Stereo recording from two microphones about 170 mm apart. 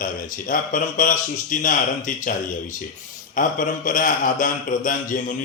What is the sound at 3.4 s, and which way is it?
A man's voice, 50° left (ahead or behind).